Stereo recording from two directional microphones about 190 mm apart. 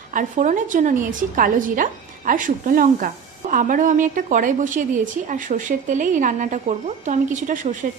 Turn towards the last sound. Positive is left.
turn(degrees=-45)  # may be behind; listen again after turning